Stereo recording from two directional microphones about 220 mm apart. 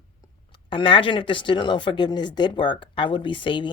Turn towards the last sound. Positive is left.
turn(degrees=20)  # may be behind; listen again after turning